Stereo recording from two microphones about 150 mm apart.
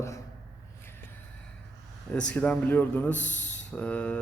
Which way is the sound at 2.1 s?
10° left (ahead or behind).